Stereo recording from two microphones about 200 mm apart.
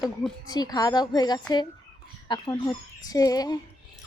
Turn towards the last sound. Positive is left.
turn(degrees=20)  # may be behind; listen again after turning